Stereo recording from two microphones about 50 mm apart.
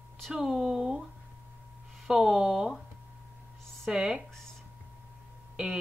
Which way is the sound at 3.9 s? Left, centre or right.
Centre.